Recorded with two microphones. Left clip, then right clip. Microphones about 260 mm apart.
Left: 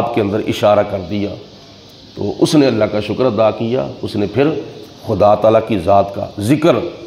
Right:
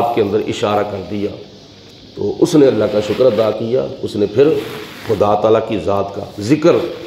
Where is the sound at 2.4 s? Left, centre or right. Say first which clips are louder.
Right 1 dB; left.